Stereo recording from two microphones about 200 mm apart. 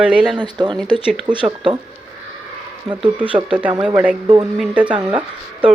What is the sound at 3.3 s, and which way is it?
A woman's voice, 5° right (ahead or behind).